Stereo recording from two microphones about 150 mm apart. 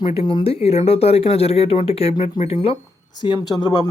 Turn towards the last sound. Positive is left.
turn(degrees=30)  # may be behind; listen again after turning